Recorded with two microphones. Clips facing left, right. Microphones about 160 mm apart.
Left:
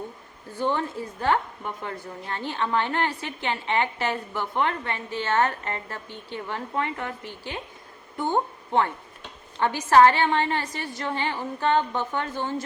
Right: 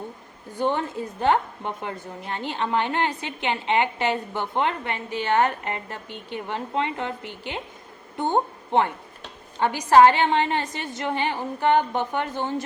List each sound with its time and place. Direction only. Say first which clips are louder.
0.5 s a woman's voice: right 2 dB; 20° right (ahead or behind)